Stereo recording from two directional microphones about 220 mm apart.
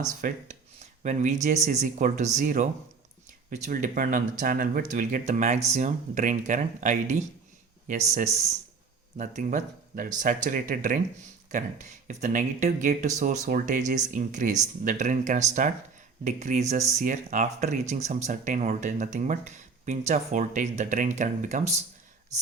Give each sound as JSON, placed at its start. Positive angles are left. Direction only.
{"t": 0.2, "sound": "speech", "side_deg": -35}
{"t": 9.1, "sound": "speech", "side_deg": -35}